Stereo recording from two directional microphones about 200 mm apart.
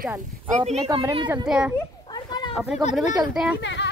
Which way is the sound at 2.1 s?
20° left (ahead or behind).